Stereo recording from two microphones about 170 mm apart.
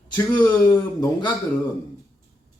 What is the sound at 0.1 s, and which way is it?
Speech, 10° left (ahead or behind).